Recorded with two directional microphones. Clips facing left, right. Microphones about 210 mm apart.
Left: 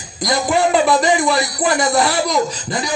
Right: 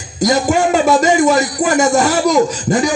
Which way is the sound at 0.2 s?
45° right (ahead or behind).